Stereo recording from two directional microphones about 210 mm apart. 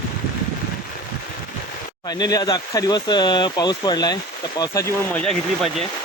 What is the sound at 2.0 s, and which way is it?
Speech, 20° left (ahead or behind).